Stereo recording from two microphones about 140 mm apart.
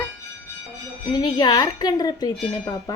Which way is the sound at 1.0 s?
30° left (ahead or behind).